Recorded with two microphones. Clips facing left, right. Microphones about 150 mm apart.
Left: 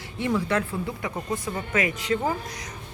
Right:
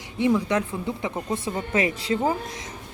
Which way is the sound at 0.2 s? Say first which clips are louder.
Right 3 dB; 15° right (ahead or behind).